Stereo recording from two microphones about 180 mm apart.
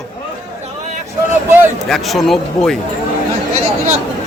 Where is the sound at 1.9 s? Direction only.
Centre (ahead or behind).